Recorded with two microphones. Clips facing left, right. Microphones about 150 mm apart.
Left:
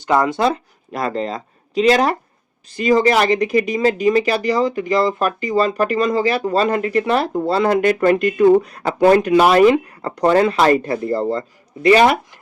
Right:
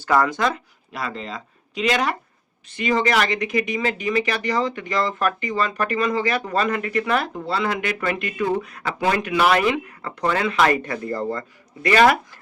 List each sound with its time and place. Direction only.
0.0 s speech: 20° left (ahead or behind)